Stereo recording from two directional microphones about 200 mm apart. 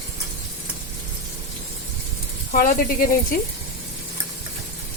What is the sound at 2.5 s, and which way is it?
Speech, 45° left (ahead or behind).